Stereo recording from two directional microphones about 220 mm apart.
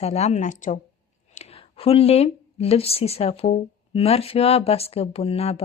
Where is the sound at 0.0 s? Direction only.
30° left (ahead or behind).